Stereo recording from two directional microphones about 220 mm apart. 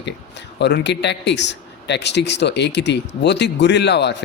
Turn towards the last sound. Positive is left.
turn(degrees=50)  # may be behind; listen again after turning